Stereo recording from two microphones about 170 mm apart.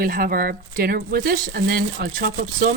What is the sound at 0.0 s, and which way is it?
Speech, 60° right (ahead or behind).